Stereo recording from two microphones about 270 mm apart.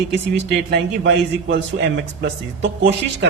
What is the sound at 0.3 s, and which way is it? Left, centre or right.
Speech, right.